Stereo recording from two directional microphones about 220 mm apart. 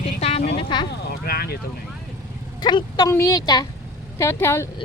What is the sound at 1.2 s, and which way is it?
Speech, 45° left (ahead or behind).